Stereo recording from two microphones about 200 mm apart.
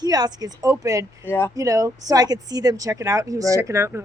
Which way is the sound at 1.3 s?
10° left (ahead or behind).